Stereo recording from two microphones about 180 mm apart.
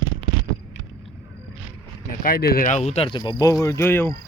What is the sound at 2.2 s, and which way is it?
Speech, 55° left (ahead or behind).